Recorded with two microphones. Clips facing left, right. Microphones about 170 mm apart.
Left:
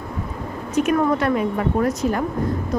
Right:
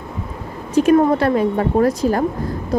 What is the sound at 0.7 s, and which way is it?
Speech, 30° right (ahead or behind).